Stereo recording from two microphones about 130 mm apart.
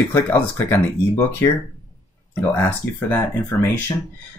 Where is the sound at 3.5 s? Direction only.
20° left (ahead or behind).